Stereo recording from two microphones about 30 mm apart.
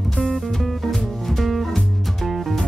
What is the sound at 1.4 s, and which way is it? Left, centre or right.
Music, centre.